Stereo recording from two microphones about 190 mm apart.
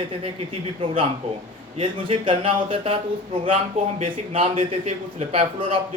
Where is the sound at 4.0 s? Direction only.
30° right (ahead or behind).